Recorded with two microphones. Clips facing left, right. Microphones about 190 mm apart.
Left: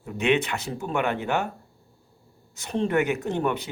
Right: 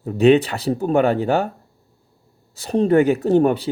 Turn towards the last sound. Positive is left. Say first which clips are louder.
# right 10 dB
turn(degrees=-35)  # may be behind; listen again after turning